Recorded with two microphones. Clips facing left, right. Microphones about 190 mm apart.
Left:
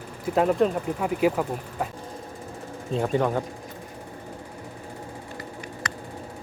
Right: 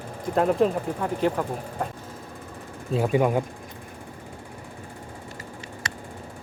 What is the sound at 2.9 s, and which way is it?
Speech, 10° right (ahead or behind).